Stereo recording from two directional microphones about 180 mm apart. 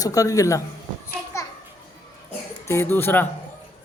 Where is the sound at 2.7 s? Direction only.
15° left (ahead or behind).